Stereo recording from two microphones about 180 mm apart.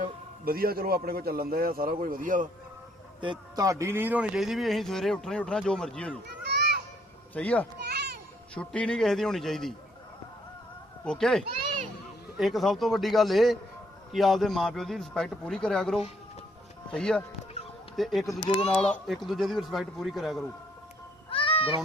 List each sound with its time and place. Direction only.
0.0 s a man's voice: 55° right (ahead or behind)
3.2 s speech: 25° right (ahead or behind); by 6.1 s 5° left (ahead or behind)
7.3 s speech: 10° left (ahead or behind)
7.9 s children playing: 65° right (ahead or behind)
8.5 s speech: 5° left (ahead or behind)
11.0 s speech: 5° left (ahead or behind)
18.3 s speech: 30° left (ahead or behind)
19.0 s speech: centre (ahead or behind)
21.2 s a sound: 30° left (ahead or behind)